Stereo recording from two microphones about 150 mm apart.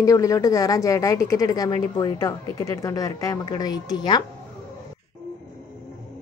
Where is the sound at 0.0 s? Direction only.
20° left (ahead or behind).